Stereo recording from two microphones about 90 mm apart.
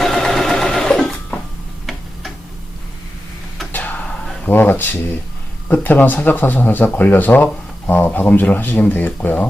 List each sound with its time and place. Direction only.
0.0 s sewing machine: centre (ahead or behind)
3.7 s music: 20° left (ahead or behind)
4.4 s speech: 20° left (ahead or behind)